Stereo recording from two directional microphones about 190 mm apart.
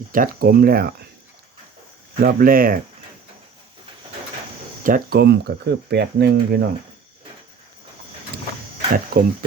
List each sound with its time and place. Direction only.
0.1 s speech: 50° right (ahead or behind)
2.2 s speech: 50° right (ahead or behind)
4.8 s speech: 45° right (ahead or behind)
9.1 s speech: 50° right (ahead or behind)